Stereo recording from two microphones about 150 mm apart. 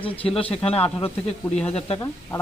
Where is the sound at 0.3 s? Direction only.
40° left (ahead or behind).